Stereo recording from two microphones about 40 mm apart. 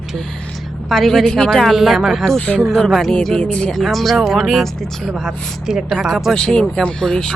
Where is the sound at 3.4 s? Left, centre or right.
Left.